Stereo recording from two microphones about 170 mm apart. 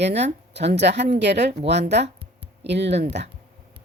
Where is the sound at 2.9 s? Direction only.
40° right (ahead or behind).